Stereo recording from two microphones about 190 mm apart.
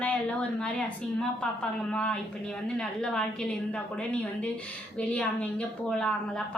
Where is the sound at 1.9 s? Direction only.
5° left (ahead or behind).